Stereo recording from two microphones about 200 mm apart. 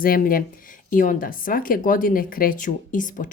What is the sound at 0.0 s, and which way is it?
Speech, 45° left (ahead or behind).